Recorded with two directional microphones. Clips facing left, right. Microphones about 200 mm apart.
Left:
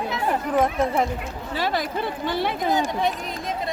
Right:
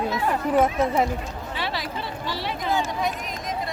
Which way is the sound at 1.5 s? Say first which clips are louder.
Left 6 dB; 45° left (ahead or behind).